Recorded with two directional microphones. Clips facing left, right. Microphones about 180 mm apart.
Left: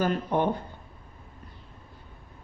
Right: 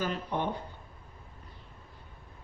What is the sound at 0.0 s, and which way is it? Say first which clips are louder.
Speech: left 7 dB; 50° left (ahead or behind).